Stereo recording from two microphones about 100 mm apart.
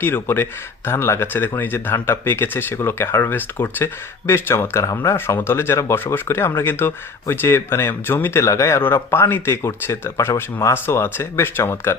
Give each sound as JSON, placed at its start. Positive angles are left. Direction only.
{"t": 0.0, "sound": "speech", "side_deg": 20}